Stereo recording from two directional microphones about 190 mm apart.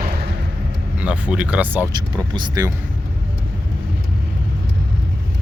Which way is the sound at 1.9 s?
20° right (ahead or behind).